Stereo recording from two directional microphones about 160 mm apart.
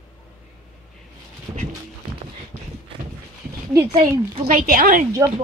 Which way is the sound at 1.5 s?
15° right (ahead or behind).